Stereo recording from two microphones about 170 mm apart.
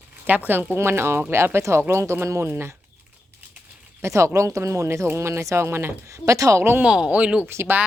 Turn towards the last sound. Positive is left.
turn(degrees=-15)  # may be behind; listen again after turning